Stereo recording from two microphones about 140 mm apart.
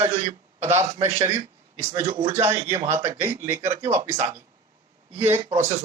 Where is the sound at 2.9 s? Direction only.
20° right (ahead or behind).